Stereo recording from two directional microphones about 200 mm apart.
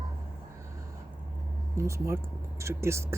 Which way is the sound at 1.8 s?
15° right (ahead or behind).